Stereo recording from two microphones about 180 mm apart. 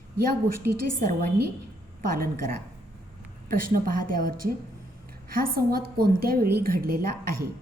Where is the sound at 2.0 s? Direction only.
55° right (ahead or behind).